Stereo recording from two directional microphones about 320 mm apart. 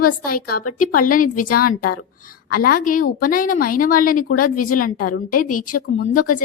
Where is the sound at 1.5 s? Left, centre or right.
Left.